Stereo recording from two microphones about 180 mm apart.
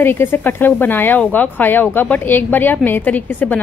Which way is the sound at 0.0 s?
10° left (ahead or behind).